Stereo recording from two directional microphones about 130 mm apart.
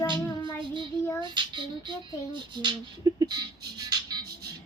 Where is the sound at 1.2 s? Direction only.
35° right (ahead or behind).